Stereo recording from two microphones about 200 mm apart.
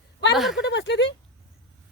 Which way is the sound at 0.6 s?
60° left (ahead or behind).